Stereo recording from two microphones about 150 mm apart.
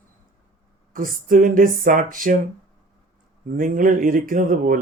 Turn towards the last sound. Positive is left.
turn(degrees=-65)  # may be behind; listen again after turning